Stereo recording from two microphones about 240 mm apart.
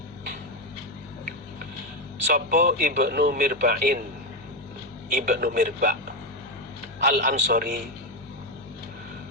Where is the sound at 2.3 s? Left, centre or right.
Right.